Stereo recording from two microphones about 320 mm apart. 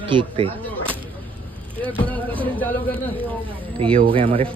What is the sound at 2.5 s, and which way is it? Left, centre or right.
Speech, centre.